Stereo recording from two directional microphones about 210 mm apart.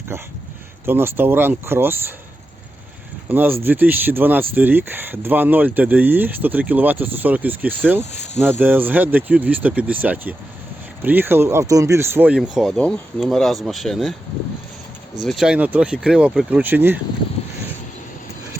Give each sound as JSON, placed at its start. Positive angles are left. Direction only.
{"t": 0.9, "sound": "speech", "side_deg": -10}
{"t": 3.2, "sound": "speech", "side_deg": -10}
{"t": 8.1, "sound": "speech", "side_deg": 30}
{"t": 8.4, "sound": "speech", "side_deg": -10}
{"t": 15.1, "sound": "speech", "side_deg": 0}